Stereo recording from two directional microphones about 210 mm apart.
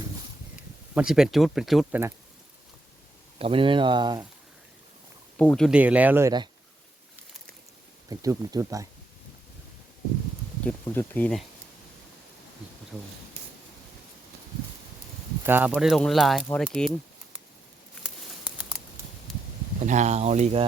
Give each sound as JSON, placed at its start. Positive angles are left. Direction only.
{"t": 0.9, "sound": "speech", "side_deg": -5}
{"t": 3.3, "sound": "speech", "side_deg": -25}
{"t": 5.4, "sound": "speech", "side_deg": 5}
{"t": 8.1, "sound": "speech", "side_deg": -15}
{"t": 10.6, "sound": "speech", "side_deg": 10}
{"t": 15.4, "sound": "speech", "side_deg": -10}
{"t": 19.8, "sound": "speech", "side_deg": -35}